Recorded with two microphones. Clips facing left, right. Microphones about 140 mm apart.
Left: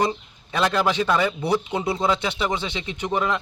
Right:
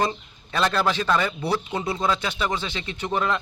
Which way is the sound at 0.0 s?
10° left (ahead or behind).